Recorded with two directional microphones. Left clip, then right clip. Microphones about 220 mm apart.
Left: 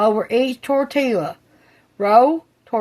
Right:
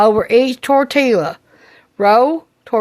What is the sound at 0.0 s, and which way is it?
Speech, 45° right (ahead or behind).